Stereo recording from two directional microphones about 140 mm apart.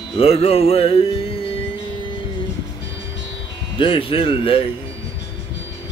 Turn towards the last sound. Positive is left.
turn(degrees=40)  # may be behind; listen again after turning